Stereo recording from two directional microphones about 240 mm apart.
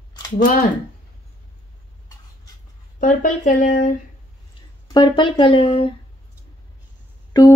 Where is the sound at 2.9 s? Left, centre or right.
Left.